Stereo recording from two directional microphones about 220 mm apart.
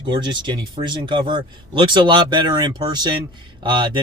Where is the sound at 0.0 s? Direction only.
20° right (ahead or behind).